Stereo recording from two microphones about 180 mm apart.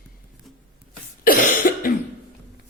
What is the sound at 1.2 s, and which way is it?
Cough, 55° left (ahead or behind).